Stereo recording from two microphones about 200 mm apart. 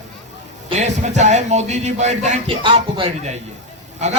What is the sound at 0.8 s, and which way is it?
A man's voice, 35° right (ahead or behind).